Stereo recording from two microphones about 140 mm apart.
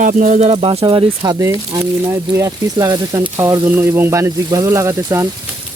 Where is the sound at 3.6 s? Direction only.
15° right (ahead or behind).